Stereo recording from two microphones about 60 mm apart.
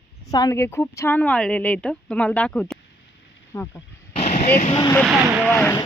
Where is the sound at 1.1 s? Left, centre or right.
Left.